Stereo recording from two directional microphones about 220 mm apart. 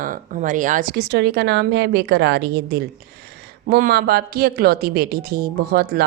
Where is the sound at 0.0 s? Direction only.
35° right (ahead or behind).